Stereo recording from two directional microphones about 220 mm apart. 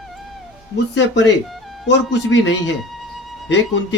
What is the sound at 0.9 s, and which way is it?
Speech, 55° left (ahead or behind).